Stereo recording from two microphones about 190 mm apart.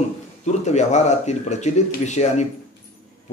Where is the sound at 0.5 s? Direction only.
35° left (ahead or behind).